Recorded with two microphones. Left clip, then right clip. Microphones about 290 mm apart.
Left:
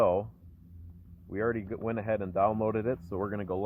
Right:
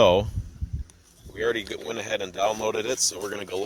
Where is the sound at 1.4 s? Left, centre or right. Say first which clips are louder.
Right 6 dB; right.